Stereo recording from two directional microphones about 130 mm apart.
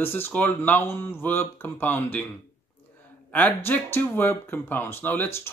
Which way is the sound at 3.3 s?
15° left (ahead or behind).